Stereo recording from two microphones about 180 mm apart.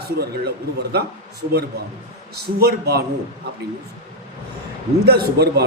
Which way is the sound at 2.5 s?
60° right (ahead or behind).